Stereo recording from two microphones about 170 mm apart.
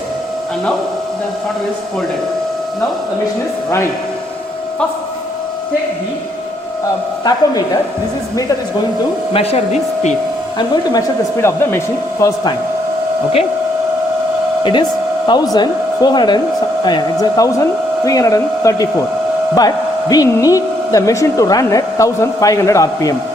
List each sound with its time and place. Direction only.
7.3 s speech: 25° left (ahead or behind)
9.3 s speech: 35° left (ahead or behind)
11.4 s speech: 15° left (ahead or behind)
14.6 s speech: 30° left (ahead or behind)